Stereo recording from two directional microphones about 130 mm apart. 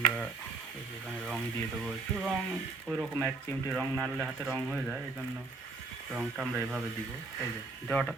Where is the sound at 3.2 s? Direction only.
15° left (ahead or behind).